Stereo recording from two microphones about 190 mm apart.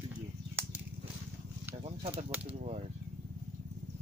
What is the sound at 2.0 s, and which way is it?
Speech, 35° right (ahead or behind).